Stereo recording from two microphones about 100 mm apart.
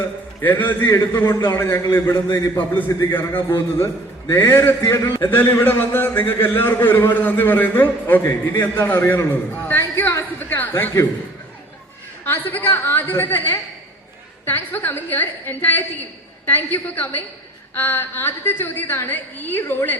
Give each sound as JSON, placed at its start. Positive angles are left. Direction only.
{"t": 0.6, "sound": "a man's voice", "side_deg": 20}
{"t": 12.2, "sound": "a man's voice", "side_deg": 20}